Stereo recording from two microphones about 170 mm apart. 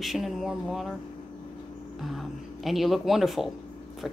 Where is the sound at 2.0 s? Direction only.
Centre (ahead or behind).